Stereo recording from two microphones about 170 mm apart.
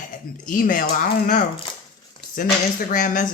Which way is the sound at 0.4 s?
55° left (ahead or behind).